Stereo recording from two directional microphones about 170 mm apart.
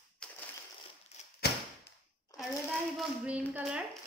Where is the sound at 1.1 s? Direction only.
40° left (ahead or behind).